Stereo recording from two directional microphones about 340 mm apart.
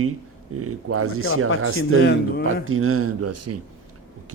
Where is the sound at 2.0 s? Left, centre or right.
Left.